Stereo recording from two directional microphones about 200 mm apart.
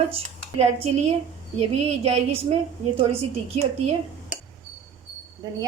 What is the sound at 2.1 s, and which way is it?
A woman's voice, 30° right (ahead or behind).